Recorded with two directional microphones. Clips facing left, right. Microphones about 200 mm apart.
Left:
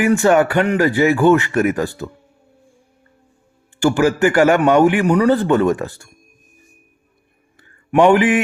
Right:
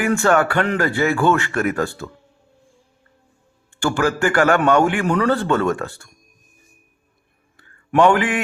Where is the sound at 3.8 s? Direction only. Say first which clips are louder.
Left 5 dB; 20° left (ahead or behind).